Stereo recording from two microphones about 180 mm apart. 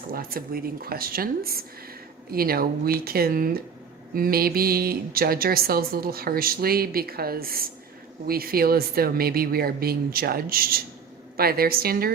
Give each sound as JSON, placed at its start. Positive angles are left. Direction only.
{"t": 0.1, "sound": "speech", "side_deg": -55}